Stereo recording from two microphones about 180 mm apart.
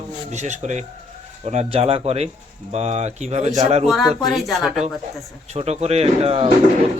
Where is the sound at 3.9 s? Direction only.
Centre (ahead or behind).